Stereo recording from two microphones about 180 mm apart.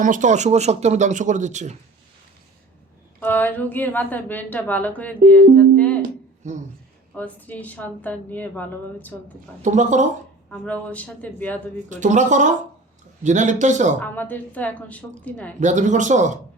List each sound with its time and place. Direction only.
0.0 s speech: 45° right (ahead or behind)
3.2 s a woman's voice: 10° left (ahead or behind)
6.0 s a sound: 40° right (ahead or behind)
7.1 s a woman's voice: 10° left (ahead or behind)
9.6 s a man's voice: 40° right (ahead or behind)
10.5 s a woman's voice: 10° left (ahead or behind)
11.9 s a man's voice: 45° right (ahead or behind)
14.0 s a woman's voice: 10° left (ahead or behind)
15.6 s speech: 45° right (ahead or behind)